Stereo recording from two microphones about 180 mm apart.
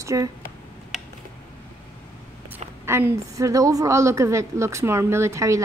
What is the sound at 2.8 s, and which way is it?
A woman's voice, 15° right (ahead or behind).